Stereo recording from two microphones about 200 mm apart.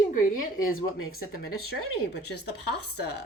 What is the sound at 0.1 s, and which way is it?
Speech, 45° left (ahead or behind).